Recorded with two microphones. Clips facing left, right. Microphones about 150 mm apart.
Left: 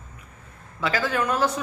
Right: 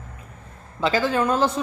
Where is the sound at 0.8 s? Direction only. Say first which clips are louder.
Right 4 dB; 25° right (ahead or behind).